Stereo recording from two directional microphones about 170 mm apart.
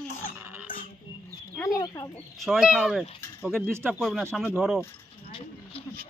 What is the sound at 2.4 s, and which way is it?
Speech, centre (ahead or behind).